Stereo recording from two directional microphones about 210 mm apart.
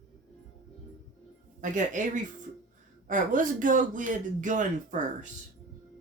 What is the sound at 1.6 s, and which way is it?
A man's voice, 35° right (ahead or behind).